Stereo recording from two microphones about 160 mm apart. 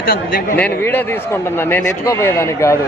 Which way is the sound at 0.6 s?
10° left (ahead or behind).